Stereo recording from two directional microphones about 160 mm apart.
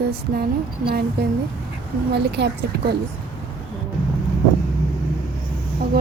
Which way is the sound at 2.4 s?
90° right.